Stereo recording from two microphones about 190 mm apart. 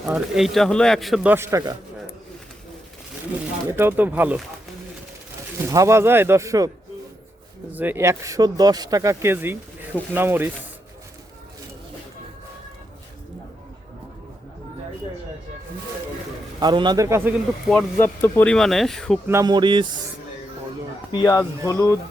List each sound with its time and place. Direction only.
0.0 s a man's voice: centre (ahead or behind)
3.7 s speech: 10° right (ahead or behind)
5.6 s speech: 15° right (ahead or behind)
7.7 s speech: 10° right (ahead or behind)
16.6 s a man's voice: 25° right (ahead or behind)
17.7 s a man's voice: 10° left (ahead or behind)
19.3 s a man's voice: 20° right (ahead or behind)
21.1 s speech: 20° left (ahead or behind)